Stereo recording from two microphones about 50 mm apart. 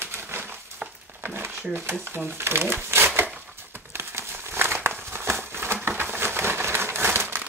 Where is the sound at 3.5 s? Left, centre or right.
Right.